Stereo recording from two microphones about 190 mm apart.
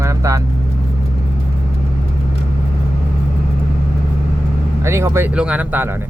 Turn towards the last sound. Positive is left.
turn(degrees=-10)  # may be behind; listen again after turning